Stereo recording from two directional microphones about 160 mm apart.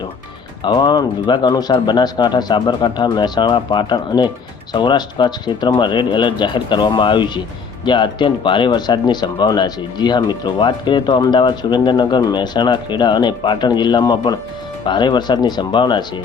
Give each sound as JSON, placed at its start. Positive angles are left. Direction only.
{"t": 0.6, "sound": "speech", "side_deg": 25}